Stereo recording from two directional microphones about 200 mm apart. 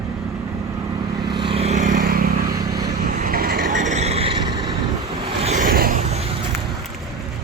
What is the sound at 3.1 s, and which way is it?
Vehicle, 45° right (ahead or behind).